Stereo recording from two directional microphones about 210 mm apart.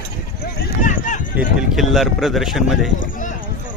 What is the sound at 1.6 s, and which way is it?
Speech, centre (ahead or behind).